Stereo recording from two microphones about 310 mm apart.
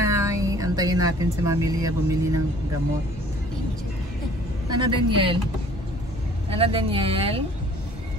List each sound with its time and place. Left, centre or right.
0.0 s speech: centre
4.6 s speech: centre
6.5 s speech: centre